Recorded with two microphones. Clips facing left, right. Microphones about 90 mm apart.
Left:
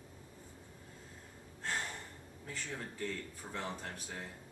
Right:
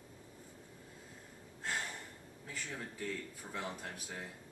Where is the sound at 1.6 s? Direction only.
5° right (ahead or behind).